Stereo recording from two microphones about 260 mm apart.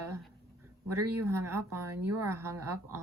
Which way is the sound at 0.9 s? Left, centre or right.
Right.